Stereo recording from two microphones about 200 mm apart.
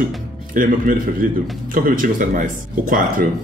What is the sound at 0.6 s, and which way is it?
Speech, 45° right (ahead or behind).